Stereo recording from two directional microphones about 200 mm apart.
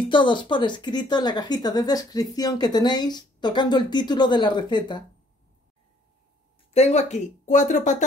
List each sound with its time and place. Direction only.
0.1 s a woman's voice: 25° left (ahead or behind)
6.7 s speech: 35° left (ahead or behind)